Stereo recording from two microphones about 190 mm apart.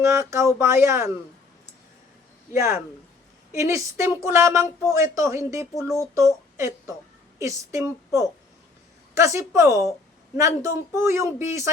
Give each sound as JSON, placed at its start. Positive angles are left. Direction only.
{"t": 0.0, "sound": "speech", "side_deg": -15}
{"t": 2.5, "sound": "a woman's voice", "side_deg": -15}